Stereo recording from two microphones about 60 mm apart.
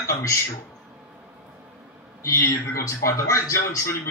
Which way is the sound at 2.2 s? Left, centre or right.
Left.